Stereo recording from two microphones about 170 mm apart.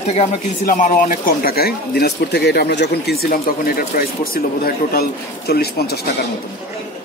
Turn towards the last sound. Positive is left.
turn(degrees=65)  # may be behind; listen again after turning